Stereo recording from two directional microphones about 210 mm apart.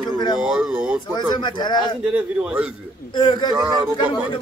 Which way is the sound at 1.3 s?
20° left (ahead or behind).